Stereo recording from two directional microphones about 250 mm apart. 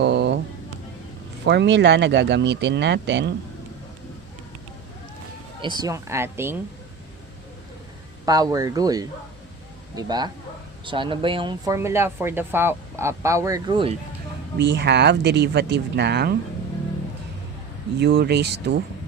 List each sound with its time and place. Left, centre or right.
0.0 s a sound: right
1.5 s speech: right
5.6 s speech: centre
8.2 s speech: centre
14.6 s speech: right
18.0 s speech: right